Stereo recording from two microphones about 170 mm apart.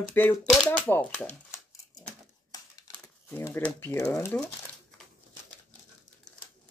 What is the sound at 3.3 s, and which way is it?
Speech, 15° left (ahead or behind).